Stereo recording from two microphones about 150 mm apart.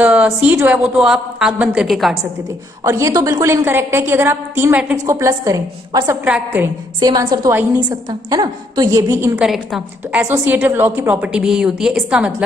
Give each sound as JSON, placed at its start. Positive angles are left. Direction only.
{"t": 0.0, "sound": "a woman's voice", "side_deg": -10}
{"t": 2.8, "sound": "a woman's voice", "side_deg": -20}
{"t": 6.2, "sound": "a woman's voice", "side_deg": -10}
{"t": 7.0, "sound": "a woman's voice", "side_deg": -25}
{"t": 9.4, "sound": "a woman's voice", "side_deg": 0}
{"t": 10.2, "sound": "a woman's voice", "side_deg": -15}